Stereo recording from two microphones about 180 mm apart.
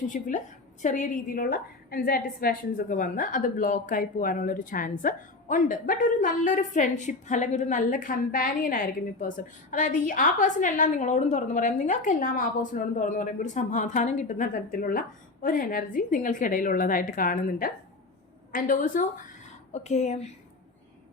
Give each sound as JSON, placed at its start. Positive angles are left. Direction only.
{"t": 0.1, "sound": "a woman's voice", "side_deg": 45}